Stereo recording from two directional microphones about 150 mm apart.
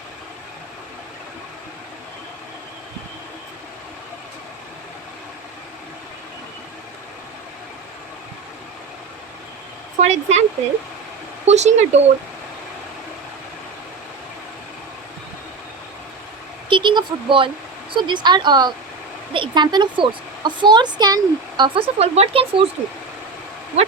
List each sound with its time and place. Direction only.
10.0 s speech: 50° right (ahead or behind)
11.4 s speech: 50° right (ahead or behind)
16.6 s a woman's voice: 30° right (ahead or behind)
21.9 s speech: 45° right (ahead or behind)